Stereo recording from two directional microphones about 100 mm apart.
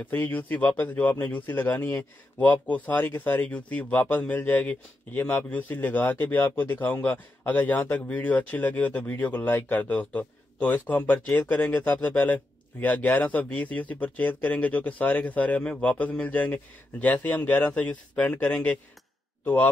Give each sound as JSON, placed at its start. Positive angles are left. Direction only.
{"t": 0.0, "sound": "a man's voice", "side_deg": 20}